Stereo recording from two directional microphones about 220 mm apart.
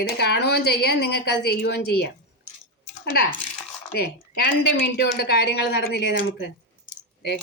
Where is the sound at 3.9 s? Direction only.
45° left (ahead or behind).